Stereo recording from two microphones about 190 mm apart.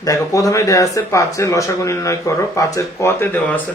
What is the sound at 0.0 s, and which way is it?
Speech, 15° left (ahead or behind).